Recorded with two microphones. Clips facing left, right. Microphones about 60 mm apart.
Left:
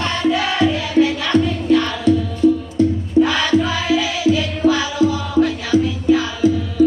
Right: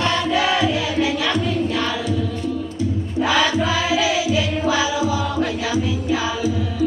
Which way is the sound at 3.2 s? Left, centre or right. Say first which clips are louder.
Left 4 dB; centre.